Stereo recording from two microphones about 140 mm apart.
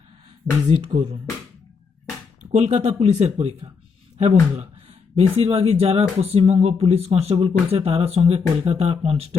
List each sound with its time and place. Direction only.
0.7 s speech: 40° right (ahead or behind)
2.4 s speech: 55° right (ahead or behind)
4.2 s a sound: 50° right (ahead or behind)
5.4 s speech: 45° right (ahead or behind)